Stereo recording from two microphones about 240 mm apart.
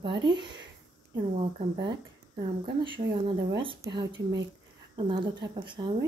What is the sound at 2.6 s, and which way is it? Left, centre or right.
Speech, centre.